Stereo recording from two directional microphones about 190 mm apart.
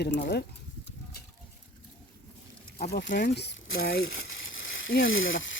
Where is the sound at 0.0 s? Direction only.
60° left (ahead or behind).